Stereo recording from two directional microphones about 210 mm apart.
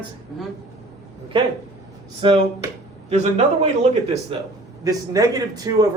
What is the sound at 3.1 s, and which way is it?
A man's voice, 30° right (ahead or behind).